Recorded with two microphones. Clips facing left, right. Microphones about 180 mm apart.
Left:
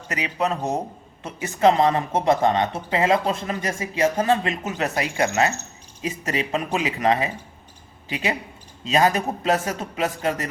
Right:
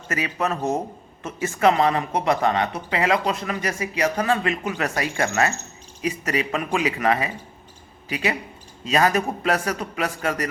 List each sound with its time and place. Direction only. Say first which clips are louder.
0.1 s a man's voice: even; 20° left (ahead or behind)